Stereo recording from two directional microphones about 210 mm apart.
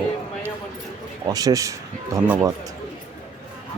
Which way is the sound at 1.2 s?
15° right (ahead or behind).